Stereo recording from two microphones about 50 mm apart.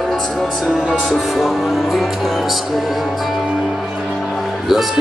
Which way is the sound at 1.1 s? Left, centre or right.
Centre.